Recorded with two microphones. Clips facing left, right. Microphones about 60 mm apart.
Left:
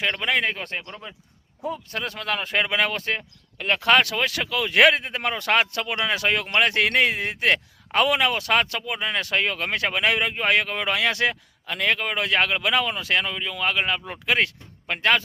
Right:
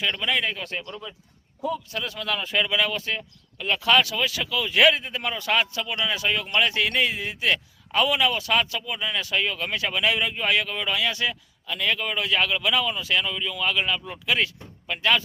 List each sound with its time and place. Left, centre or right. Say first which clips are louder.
0.0 s speech: left 2 dB; left